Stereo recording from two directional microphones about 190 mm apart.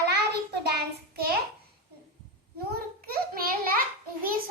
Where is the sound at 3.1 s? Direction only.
50° right (ahead or behind).